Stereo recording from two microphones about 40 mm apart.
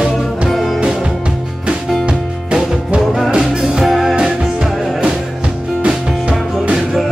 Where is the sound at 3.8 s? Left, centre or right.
Centre.